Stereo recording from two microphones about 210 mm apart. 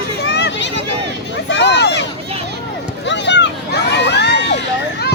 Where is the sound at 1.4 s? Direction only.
55° left (ahead or behind).